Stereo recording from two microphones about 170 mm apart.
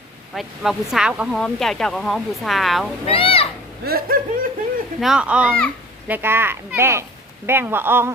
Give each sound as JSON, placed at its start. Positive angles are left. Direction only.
{"t": 0.3, "sound": "speech", "side_deg": 0}
{"t": 3.1, "sound": "speech", "side_deg": 30}
{"t": 3.8, "sound": "speech", "side_deg": -60}
{"t": 4.9, "sound": "speech", "side_deg": -5}